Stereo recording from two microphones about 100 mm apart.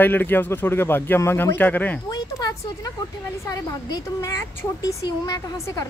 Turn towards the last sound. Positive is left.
turn(degrees=40)  # may be behind; listen again after turning